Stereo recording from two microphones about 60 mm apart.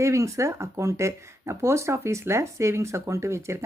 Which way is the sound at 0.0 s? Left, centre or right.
Right.